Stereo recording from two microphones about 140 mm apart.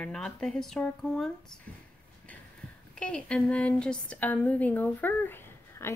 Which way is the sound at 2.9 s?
10° left (ahead or behind).